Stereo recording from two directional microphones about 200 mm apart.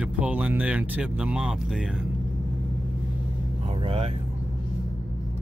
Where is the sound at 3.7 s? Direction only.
30° right (ahead or behind).